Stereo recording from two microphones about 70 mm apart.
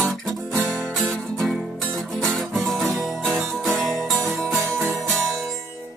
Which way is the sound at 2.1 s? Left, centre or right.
Centre.